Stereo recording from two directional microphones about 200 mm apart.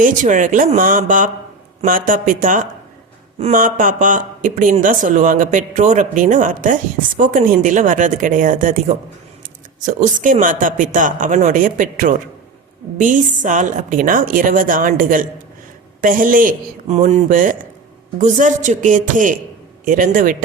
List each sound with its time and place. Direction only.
0.0 s a woman's voice: 40° right (ahead or behind)